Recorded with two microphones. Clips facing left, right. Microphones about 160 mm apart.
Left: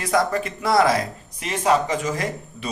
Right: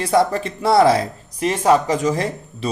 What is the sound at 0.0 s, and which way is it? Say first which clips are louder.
Speech: right 4 dB; 30° right (ahead or behind).